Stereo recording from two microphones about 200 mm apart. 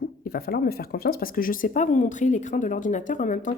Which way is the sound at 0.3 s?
50° left (ahead or behind).